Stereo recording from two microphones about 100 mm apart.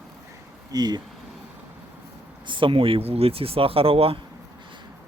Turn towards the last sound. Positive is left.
turn(degrees=-70)  # may be behind; listen again after turning